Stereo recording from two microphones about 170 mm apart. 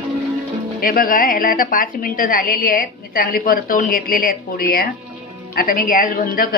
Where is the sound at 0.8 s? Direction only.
60° left (ahead or behind).